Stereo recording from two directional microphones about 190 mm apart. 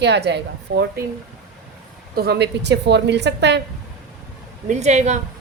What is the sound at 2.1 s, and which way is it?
A woman's voice, 60° right (ahead or behind).